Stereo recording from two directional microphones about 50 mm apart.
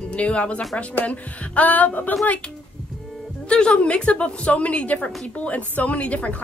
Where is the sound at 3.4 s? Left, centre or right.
Centre.